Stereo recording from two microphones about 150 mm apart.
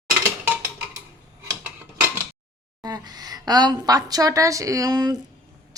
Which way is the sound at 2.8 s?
25° right (ahead or behind).